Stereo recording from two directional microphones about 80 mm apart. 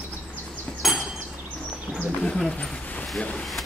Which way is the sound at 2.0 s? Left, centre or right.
Centre.